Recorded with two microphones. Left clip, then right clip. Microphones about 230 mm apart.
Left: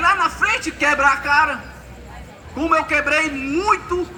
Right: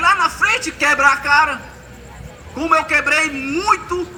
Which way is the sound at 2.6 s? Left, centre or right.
Right.